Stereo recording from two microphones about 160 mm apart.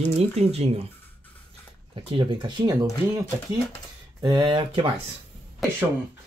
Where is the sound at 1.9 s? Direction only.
35° right (ahead or behind).